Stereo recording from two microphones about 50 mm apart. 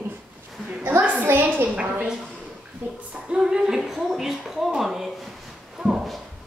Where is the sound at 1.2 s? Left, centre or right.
Right.